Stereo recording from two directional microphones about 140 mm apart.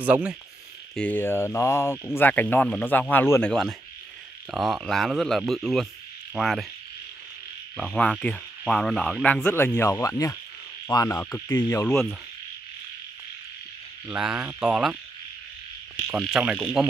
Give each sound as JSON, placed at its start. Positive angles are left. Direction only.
{"t": 0.0, "sound": "speech", "side_deg": -10}
{"t": 0.9, "sound": "speech", "side_deg": 10}
{"t": 4.5, "sound": "speech", "side_deg": 0}
{"t": 7.7, "sound": "speech", "side_deg": 0}
{"t": 10.9, "sound": "insect", "side_deg": 25}
{"t": 11.1, "sound": "speech", "side_deg": 15}
{"t": 14.0, "sound": "speech", "side_deg": -5}
{"t": 16.1, "sound": "speech", "side_deg": -5}